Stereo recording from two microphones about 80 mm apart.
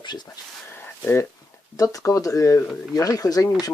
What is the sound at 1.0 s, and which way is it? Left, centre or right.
Speech, left.